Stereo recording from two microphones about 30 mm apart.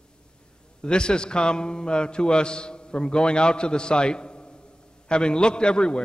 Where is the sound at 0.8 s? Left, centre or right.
Left.